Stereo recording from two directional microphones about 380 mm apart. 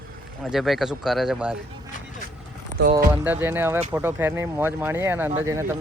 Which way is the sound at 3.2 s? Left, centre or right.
Centre.